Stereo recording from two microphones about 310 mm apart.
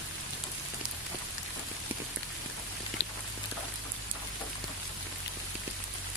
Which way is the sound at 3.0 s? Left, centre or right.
Left.